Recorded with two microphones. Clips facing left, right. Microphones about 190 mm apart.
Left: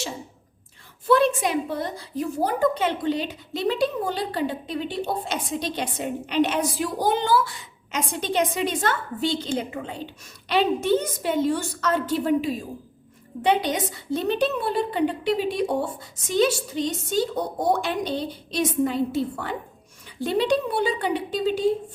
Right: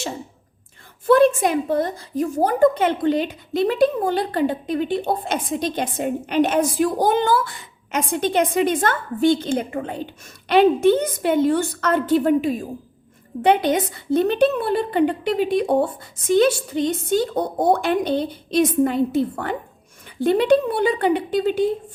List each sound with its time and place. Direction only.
1.0 s a woman's voice: 50° right (ahead or behind)